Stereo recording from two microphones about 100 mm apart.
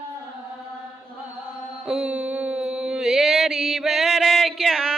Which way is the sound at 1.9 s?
10° right (ahead or behind).